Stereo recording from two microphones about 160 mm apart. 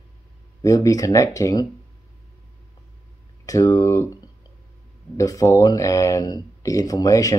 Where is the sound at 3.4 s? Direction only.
20° left (ahead or behind).